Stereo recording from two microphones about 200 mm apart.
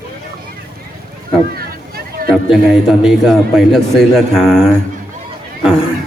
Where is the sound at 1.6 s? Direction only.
50° right (ahead or behind).